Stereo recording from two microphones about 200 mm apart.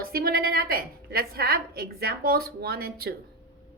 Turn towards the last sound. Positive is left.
turn(degrees=-50)  # may be behind; listen again after turning